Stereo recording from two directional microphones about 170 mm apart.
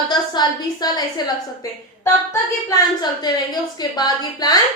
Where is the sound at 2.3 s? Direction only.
20° left (ahead or behind).